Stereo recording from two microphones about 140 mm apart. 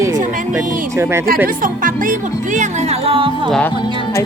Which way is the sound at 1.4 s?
75° right (ahead or behind).